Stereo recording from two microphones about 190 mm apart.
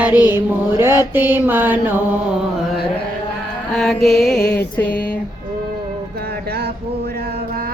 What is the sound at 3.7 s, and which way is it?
Mantra, centre (ahead or behind).